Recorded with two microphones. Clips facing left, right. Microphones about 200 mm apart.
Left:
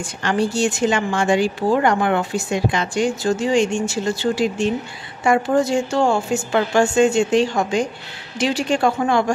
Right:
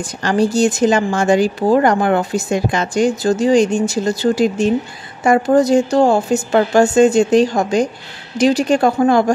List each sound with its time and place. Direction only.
0.0 s a woman's voice: 40° right (ahead or behind)